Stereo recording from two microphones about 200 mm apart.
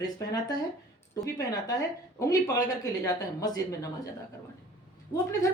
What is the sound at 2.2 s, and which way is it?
Speech, 15° left (ahead or behind).